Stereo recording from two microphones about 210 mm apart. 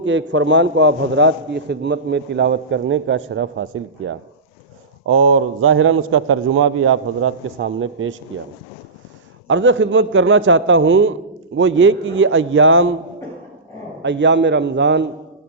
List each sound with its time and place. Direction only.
0.0 s a man's voice: 60° right (ahead or behind)
9.5 s a man's voice: 65° right (ahead or behind)
14.0 s a man's voice: 60° right (ahead or behind)